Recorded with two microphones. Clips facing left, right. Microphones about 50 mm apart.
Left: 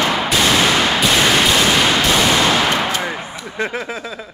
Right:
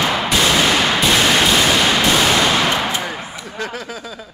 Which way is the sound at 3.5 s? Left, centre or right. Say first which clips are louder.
Left 5 dB; left.